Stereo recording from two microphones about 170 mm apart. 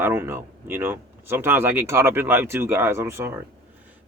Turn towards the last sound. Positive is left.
turn(degrees=-15)  # may be behind; listen again after turning